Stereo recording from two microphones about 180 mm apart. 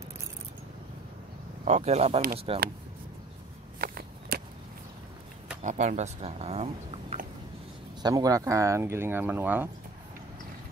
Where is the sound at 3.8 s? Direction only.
60° right (ahead or behind).